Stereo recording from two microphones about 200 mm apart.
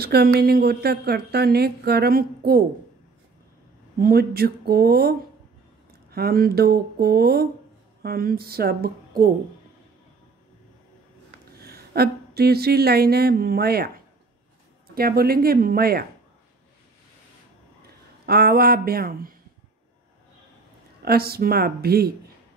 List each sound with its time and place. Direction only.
0.0 s a woman's voice: 50° right (ahead or behind)
4.0 s a woman's voice: 50° right (ahead or behind)
11.6 s a woman's voice: 50° right (ahead or behind)
18.2 s a woman's voice: 50° right (ahead or behind)
21.0 s a woman's voice: 50° right (ahead or behind)